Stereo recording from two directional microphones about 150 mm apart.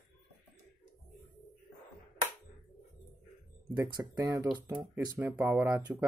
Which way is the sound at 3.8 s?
20° right (ahead or behind).